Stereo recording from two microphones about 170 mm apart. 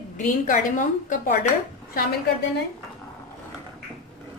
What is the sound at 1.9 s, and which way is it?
Speech, 60° left (ahead or behind).